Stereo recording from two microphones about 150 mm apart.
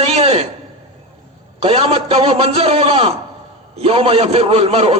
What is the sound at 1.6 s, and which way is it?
A man's voice, 40° right (ahead or behind).